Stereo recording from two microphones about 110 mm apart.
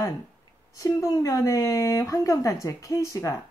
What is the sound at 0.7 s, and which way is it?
Speech, 30° left (ahead or behind).